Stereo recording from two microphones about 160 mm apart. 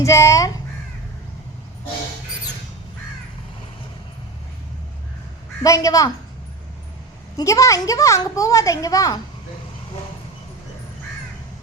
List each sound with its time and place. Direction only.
0.0 s a child's voice: 20° left (ahead or behind)
5.6 s a child's voice: 20° left (ahead or behind)
7.3 s a child's voice: 20° left (ahead or behind)